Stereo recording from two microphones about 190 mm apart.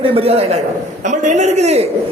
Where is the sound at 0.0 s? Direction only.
30° right (ahead or behind).